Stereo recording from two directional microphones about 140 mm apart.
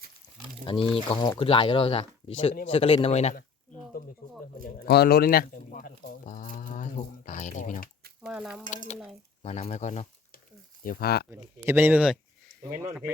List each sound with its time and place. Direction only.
0.6 s speech: 35° left (ahead or behind)
4.6 s speech: 90° left; by 7.9 s 65° left (ahead or behind)
8.2 s stir: 5° right (ahead or behind)
9.4 s speech: 45° left (ahead or behind)
10.8 s speech: 90° left
11.3 s speech: 15° right (ahead or behind)